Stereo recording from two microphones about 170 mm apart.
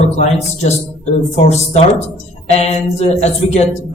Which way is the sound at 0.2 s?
40° left (ahead or behind).